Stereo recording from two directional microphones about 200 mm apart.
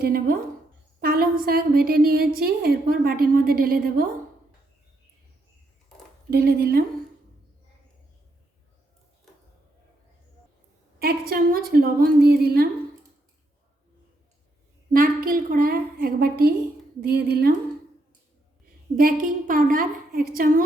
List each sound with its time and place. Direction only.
0.0 s a woman's voice: 45° right (ahead or behind)
6.3 s a woman's voice: 50° right (ahead or behind)
11.0 s a woman's voice: 50° right (ahead or behind)
14.9 s a woman's voice: 45° right (ahead or behind)
18.9 s a woman's voice: 45° right (ahead or behind)